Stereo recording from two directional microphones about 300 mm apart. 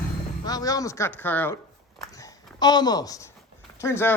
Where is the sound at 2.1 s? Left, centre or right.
Centre.